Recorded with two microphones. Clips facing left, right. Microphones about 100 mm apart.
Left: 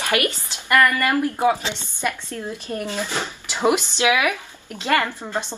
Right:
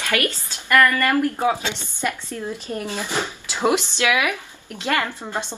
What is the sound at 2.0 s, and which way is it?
Speech, 15° right (ahead or behind).